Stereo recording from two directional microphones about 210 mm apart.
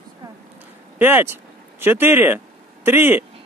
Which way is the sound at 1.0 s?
10° right (ahead or behind).